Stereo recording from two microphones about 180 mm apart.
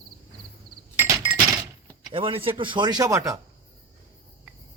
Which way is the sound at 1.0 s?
15° right (ahead or behind).